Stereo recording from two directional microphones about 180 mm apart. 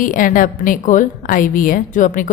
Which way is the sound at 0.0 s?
50° left (ahead or behind).